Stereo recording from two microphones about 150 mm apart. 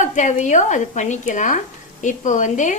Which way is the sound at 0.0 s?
55° left (ahead or behind).